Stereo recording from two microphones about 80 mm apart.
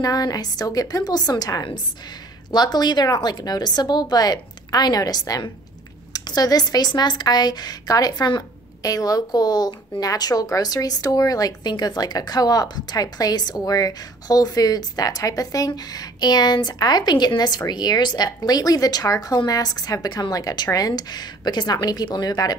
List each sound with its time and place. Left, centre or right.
0.0 s a woman's voice: left
2.5 s speech: left